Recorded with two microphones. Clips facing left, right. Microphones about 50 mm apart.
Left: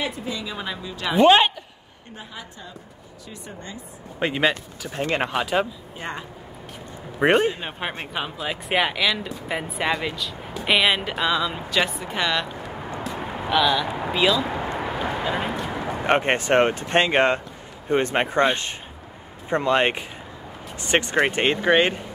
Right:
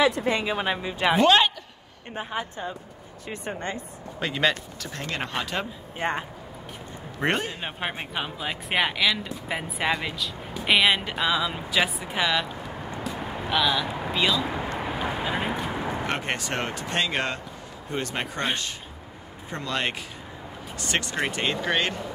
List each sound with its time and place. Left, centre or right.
0.0 s a woman's voice: right
0.3 s speech: right
1.2 s speech: left
2.1 s speech: right
4.2 s speech: centre
5.3 s a man's voice: centre
5.9 s speech: right
7.2 s a man's voice: centre
7.6 s speech: centre
14.8 s vehicle: centre
16.1 s speech: left